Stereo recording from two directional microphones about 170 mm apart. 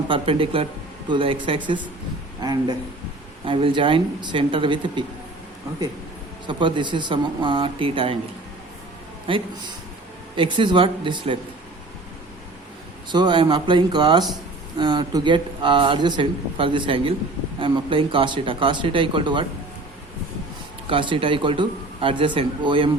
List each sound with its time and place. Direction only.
0.1 s a man's voice: 30° right (ahead or behind)
6.5 s a man's voice: 30° right (ahead or behind)
9.3 s a man's voice: 30° right (ahead or behind)
13.1 s a man's voice: 25° right (ahead or behind)
20.8 s speech: 30° right (ahead or behind)